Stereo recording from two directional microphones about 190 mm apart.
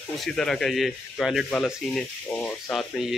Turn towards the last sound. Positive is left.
turn(degrees=0)  # may be behind; listen again after turning